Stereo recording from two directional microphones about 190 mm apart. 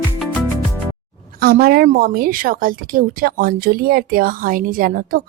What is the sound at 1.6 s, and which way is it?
Speech, 55° right (ahead or behind).